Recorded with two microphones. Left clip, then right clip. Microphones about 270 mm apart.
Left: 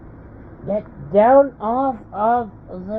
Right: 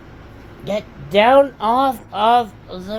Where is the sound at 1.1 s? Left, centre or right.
Right.